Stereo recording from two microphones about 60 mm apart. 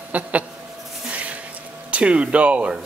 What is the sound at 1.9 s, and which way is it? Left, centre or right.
Speech, centre.